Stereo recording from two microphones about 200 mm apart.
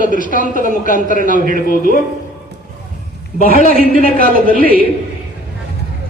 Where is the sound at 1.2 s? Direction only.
40° right (ahead or behind).